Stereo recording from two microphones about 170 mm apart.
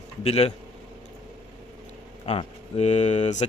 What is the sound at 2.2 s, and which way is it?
A man's voice, 35° left (ahead or behind).